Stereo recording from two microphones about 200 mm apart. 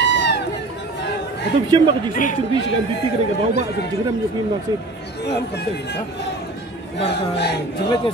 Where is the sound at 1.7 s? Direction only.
20° right (ahead or behind).